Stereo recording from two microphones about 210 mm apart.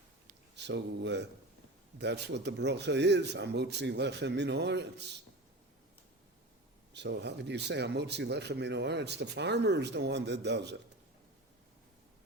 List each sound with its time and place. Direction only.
0.3 s a sound: 55° right (ahead or behind)
2.0 s speech: 55° right (ahead or behind)
6.9 s speech: 55° right (ahead or behind)